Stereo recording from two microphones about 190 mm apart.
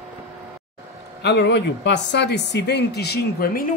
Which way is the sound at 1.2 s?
65° left (ahead or behind).